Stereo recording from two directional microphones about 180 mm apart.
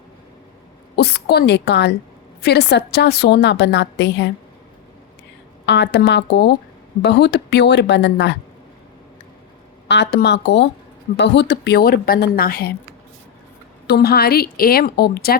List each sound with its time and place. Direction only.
0.9 s a woman's voice: 65° left (ahead or behind)
5.6 s a woman's voice: 75° left (ahead or behind)
9.9 s a woman's voice: 65° left (ahead or behind)
13.8 s a woman's voice: 65° left (ahead or behind)